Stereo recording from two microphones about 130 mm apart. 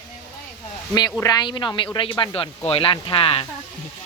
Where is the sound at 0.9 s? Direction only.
30° left (ahead or behind).